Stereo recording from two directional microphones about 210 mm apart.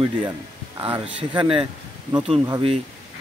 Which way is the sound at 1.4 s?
25° right (ahead or behind).